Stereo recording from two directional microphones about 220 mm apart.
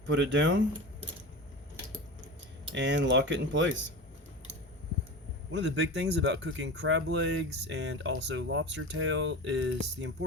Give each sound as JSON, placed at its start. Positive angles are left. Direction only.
{"t": 0.1, "sound": "speech", "side_deg": -55}
{"t": 2.7, "sound": "speech", "side_deg": -55}
{"t": 5.5, "sound": "speech", "side_deg": -55}